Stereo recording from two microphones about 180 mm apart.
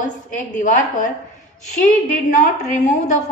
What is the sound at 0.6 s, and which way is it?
A woman's voice, 45° left (ahead or behind).